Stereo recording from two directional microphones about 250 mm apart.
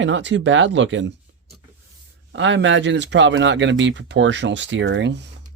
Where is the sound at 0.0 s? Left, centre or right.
Right.